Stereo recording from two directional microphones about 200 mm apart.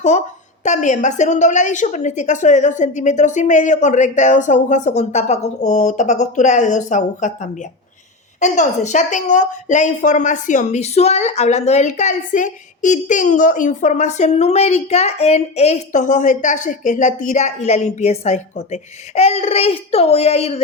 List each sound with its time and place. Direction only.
0.6 s a woman's voice: 35° left (ahead or behind)
8.4 s a woman's voice: 35° left (ahead or behind)